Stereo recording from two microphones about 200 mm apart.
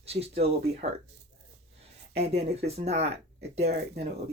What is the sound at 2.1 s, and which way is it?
Speech, 30° right (ahead or behind).